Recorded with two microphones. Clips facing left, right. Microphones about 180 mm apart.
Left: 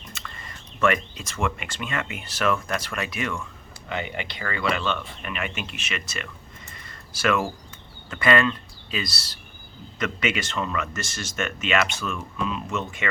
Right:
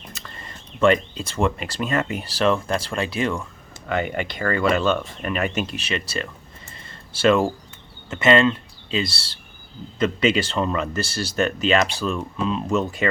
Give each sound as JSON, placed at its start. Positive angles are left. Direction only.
{"t": 0.1, "sound": "speech", "side_deg": -35}
{"t": 3.8, "sound": "speech", "side_deg": -50}